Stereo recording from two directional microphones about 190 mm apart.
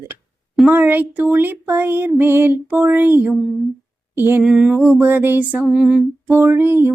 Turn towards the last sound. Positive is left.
turn(degrees=-10)  # may be behind; listen again after turning